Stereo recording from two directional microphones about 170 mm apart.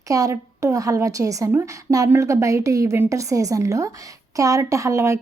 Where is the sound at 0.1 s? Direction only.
20° right (ahead or behind).